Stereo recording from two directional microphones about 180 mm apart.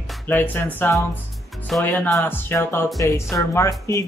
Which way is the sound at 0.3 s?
10° left (ahead or behind).